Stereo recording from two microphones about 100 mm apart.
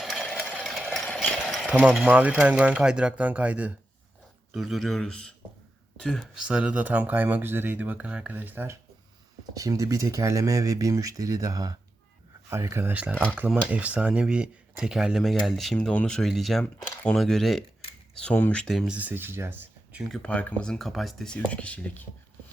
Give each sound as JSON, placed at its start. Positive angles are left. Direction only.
{"t": 0.0, "sound": "a sound", "side_deg": 0}
{"t": 1.6, "sound": "mechanisms", "side_deg": -10}
{"t": 2.0, "sound": "speech", "side_deg": -10}
{"t": 4.5, "sound": "speech", "side_deg": -5}
{"t": 9.6, "sound": "speech", "side_deg": -35}
{"t": 12.5, "sound": "speech", "side_deg": -25}
{"t": 12.9, "sound": "speech", "side_deg": -15}
{"t": 18.2, "sound": "speech", "side_deg": 15}
{"t": 18.6, "sound": "speech", "side_deg": 5}
{"t": 18.9, "sound": "speech", "side_deg": -15}
{"t": 20.1, "sound": "speech", "side_deg": 10}
{"t": 21.3, "sound": "speech", "side_deg": 15}